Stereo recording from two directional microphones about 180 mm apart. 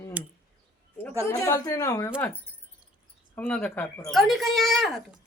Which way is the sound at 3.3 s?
10° left (ahead or behind).